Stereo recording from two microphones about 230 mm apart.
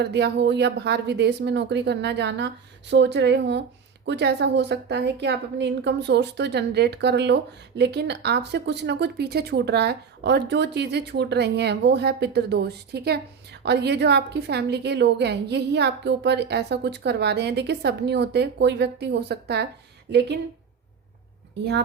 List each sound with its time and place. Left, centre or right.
0.0 s speech: right